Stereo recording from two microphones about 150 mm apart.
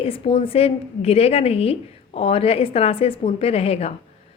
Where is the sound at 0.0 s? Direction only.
35° left (ahead or behind).